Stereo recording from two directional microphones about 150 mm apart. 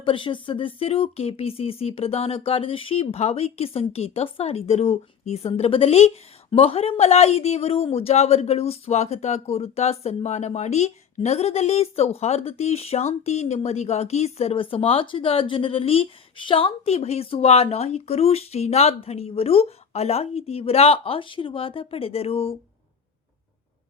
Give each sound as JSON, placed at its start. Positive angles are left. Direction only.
{"t": 0.0, "sound": "speech", "side_deg": 35}